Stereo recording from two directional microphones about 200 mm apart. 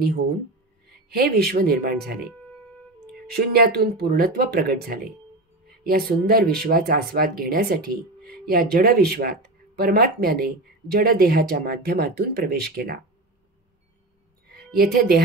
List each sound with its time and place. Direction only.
1.1 s speech: 50° right (ahead or behind)
3.3 s speech: 50° right (ahead or behind)
14.5 s speech: 50° right (ahead or behind)